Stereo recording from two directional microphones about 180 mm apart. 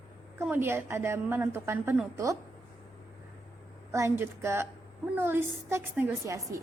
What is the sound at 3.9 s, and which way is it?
A woman's voice, 15° right (ahead or behind).